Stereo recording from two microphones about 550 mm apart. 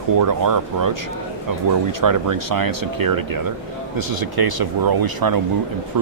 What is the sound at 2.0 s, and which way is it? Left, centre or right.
Speech, right.